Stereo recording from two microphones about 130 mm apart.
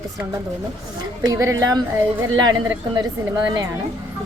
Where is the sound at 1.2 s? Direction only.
25° right (ahead or behind).